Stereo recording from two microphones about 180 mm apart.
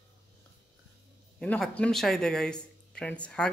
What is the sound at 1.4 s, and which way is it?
Speech, 5° left (ahead or behind).